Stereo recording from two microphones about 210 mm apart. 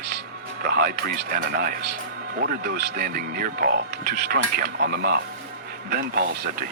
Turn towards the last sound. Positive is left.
turn(degrees=-45)  # may be behind; listen again after turning